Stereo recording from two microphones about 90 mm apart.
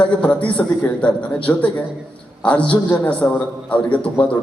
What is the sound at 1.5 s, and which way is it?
A man's voice, 25° left (ahead or behind).